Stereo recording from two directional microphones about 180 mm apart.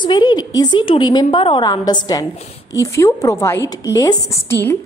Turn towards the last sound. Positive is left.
turn(degrees=15)  # may be behind; listen again after turning